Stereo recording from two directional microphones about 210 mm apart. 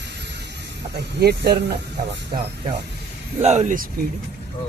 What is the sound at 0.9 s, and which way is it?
Speech, 50° right (ahead or behind).